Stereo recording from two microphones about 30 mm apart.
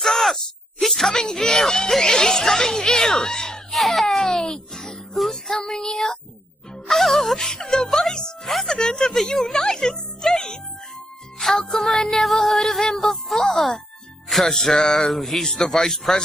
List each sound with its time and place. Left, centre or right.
0.0 s speech: centre
3.7 s music: centre
5.6 s speech: centre
6.9 s music: centre
7.3 s speech: centre
7.7 s music: centre
8.7 s speech: centre
11.3 s music: centre
15.5 s speech: centre